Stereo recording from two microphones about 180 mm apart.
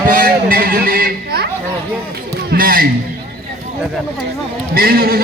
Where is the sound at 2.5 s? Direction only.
55° right (ahead or behind).